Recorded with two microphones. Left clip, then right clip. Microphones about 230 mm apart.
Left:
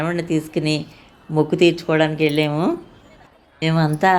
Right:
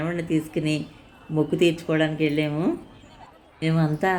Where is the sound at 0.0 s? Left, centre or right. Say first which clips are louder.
Left 4 dB; centre.